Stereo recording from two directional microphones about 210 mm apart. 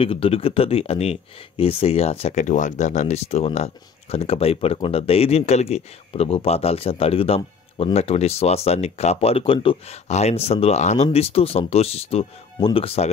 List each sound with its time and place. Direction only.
0.0 s speech: 25° left (ahead or behind)